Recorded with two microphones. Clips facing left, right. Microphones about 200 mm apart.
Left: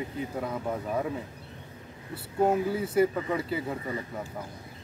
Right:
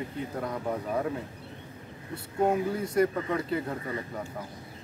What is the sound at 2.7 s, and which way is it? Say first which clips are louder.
Speech: left 1 dB; 5° left (ahead or behind).